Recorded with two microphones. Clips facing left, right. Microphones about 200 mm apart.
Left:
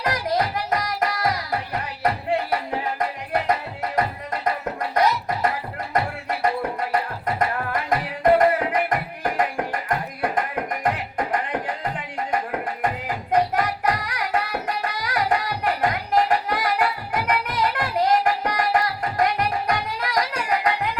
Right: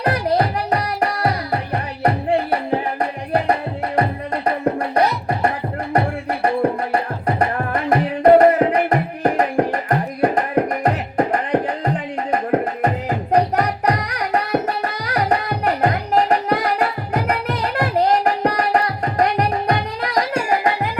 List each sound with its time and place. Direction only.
0.0 s music: 30° right (ahead or behind)
6.4 s music: 35° right (ahead or behind)
20.0 s music: 30° right (ahead or behind)